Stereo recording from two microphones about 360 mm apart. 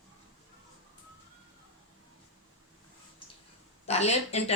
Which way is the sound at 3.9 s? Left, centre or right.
Centre.